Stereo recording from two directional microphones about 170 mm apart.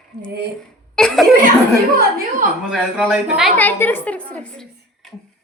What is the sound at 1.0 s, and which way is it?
Chuckle, 5° left (ahead or behind).